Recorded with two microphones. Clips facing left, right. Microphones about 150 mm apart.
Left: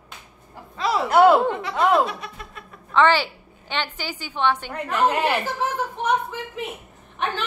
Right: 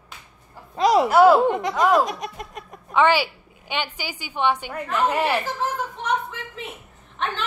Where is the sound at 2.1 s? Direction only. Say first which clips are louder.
Right 4 dB; 45° right (ahead or behind).